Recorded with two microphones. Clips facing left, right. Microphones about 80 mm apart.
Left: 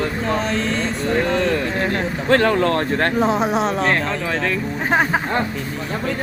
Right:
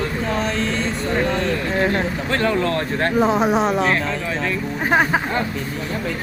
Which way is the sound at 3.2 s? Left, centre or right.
Centre.